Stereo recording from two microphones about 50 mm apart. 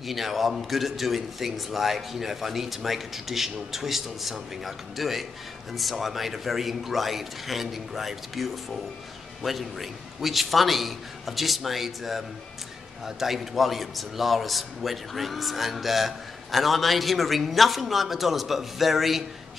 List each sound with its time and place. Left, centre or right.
0.0 s a man's voice: centre